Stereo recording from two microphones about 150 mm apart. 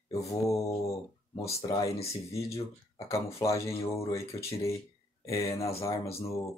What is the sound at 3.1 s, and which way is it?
Speech, 20° left (ahead or behind).